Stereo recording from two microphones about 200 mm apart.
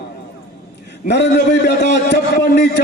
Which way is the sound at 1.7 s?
55° left (ahead or behind).